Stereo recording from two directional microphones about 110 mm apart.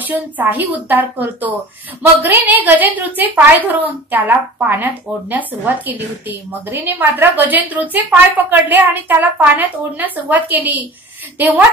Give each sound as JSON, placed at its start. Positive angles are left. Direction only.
{"t": 0.0, "sound": "a woman's voice", "side_deg": -15}